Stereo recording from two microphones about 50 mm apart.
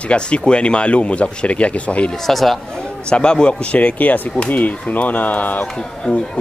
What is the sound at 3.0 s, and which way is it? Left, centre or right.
Speech, centre.